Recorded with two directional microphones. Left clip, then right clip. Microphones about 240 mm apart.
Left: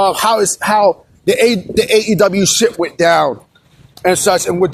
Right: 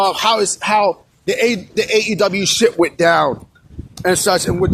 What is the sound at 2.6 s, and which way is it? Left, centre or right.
Speech, right.